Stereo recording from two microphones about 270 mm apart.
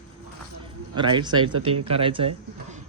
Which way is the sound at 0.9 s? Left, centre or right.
Centre.